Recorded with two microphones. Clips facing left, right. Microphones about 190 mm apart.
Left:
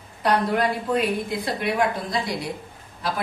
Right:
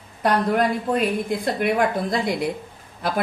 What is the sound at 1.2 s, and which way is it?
A woman's voice, 55° right (ahead or behind).